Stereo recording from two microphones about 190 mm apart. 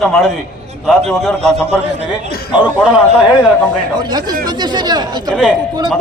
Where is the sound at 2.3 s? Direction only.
55° left (ahead or behind).